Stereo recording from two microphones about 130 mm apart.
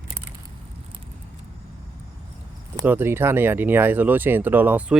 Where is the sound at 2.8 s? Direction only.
15° right (ahead or behind).